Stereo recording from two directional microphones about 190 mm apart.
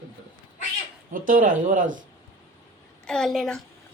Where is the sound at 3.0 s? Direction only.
5° left (ahead or behind).